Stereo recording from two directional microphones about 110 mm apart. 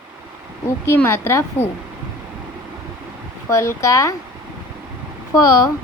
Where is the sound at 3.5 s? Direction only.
30° left (ahead or behind).